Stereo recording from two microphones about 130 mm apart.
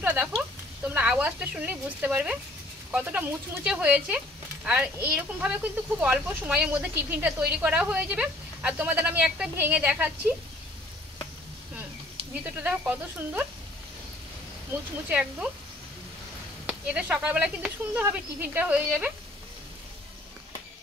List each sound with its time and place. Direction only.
0.0 s a sound: 10° right (ahead or behind)
0.8 s speech: 10° right (ahead or behind)
12.4 s speech: 10° right (ahead or behind)
14.7 s speech: 10° right (ahead or behind)
16.6 s speech: 10° right (ahead or behind)